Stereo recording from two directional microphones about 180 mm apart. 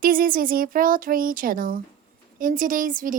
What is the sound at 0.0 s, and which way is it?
Speech, 55° right (ahead or behind).